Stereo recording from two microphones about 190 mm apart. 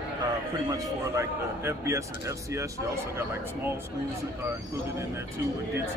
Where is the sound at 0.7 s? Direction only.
15° right (ahead or behind).